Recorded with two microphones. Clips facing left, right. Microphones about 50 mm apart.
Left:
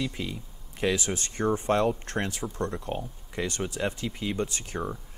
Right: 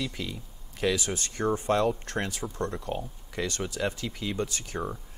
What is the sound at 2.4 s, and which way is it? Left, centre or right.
Speech, left.